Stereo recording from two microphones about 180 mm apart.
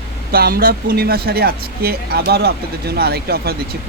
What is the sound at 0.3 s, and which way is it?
Speech, 55° right (ahead or behind).